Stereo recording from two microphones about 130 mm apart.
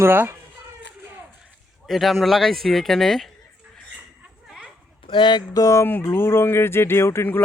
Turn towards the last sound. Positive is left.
turn(degrees=20)  # may be behind; listen again after turning